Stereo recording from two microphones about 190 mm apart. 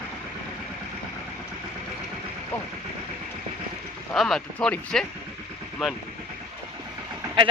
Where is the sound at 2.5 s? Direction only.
10° left (ahead or behind).